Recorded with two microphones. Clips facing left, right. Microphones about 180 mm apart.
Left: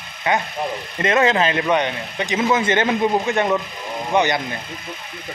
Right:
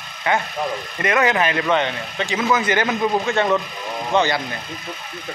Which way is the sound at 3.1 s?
15° left (ahead or behind).